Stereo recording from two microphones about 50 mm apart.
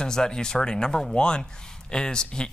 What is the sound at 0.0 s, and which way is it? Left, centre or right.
Speech, centre.